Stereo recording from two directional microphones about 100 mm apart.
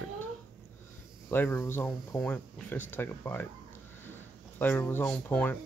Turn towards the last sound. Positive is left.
turn(degrees=15)  # may be behind; listen again after turning